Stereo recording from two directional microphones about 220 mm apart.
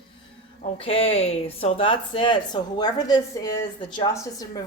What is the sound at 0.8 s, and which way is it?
Speech, 25° left (ahead or behind).